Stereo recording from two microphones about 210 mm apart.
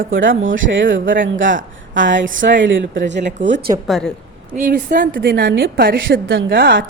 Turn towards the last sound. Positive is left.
turn(degrees=-50)  # may be behind; listen again after turning